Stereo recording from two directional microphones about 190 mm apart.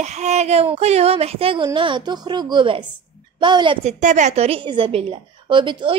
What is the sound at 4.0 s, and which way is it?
A woman's voice, 40° right (ahead or behind).